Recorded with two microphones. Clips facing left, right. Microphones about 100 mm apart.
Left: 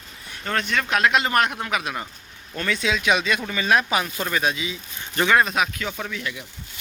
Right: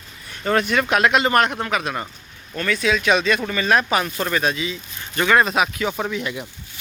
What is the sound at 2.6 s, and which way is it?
Speech, 20° left (ahead or behind).